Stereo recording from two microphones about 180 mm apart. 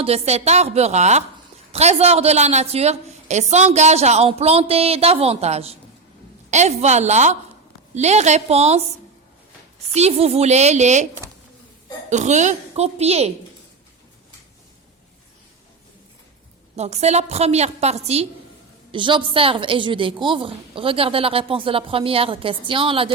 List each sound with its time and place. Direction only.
0.0 s a woman's voice: 35° right (ahead or behind)
9.9 s a woman's voice: 35° right (ahead or behind)
16.7 s a woman's voice: 35° right (ahead or behind)